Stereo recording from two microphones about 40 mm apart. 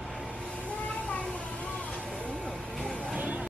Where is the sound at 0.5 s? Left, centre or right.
Left.